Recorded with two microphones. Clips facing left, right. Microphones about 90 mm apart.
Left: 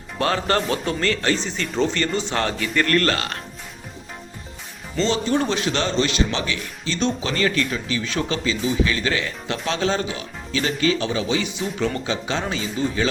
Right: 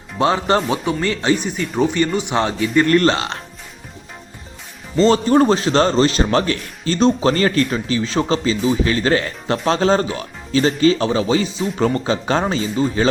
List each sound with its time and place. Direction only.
0.2 s speech: 20° right (ahead or behind)
5.0 s speech: 45° right (ahead or behind)